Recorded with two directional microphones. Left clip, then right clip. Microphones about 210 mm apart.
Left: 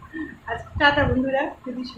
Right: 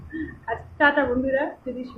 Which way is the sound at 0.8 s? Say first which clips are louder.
Left 1 dB; 10° left (ahead or behind).